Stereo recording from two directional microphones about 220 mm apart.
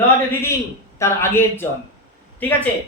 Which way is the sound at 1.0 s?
10° left (ahead or behind).